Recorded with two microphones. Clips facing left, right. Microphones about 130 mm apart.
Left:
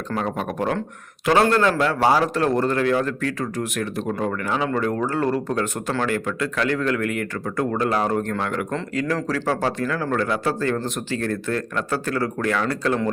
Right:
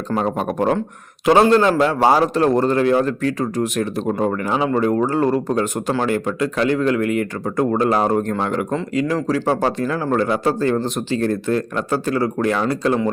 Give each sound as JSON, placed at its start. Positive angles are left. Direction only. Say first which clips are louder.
{"t": 0.2, "sound": "a man's voice", "louder": "right 5 dB", "side_deg": -30}